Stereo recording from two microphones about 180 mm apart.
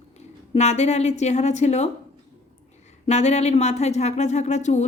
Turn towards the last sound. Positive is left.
turn(degrees=40)  # may be behind; listen again after turning